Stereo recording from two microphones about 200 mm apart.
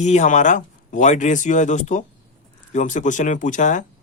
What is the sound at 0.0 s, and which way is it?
Speech, 35° left (ahead or behind).